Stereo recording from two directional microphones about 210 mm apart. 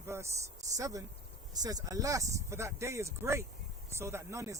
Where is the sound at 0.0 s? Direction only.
10° right (ahead or behind).